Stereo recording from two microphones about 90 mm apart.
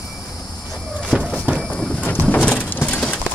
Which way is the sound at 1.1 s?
15° right (ahead or behind).